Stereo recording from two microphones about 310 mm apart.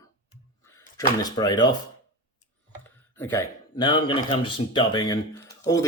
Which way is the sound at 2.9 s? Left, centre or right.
Centre.